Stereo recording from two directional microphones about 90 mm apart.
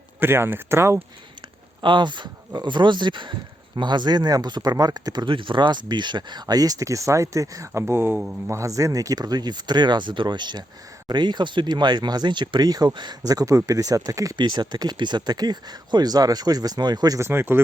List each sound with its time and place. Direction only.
0.2 s speech: 25° right (ahead or behind)
1.8 s speech: 60° right (ahead or behind); by 14.3 s 40° right (ahead or behind)
14.3 s speech: 55° right (ahead or behind)
17.2 s speech: 30° right (ahead or behind)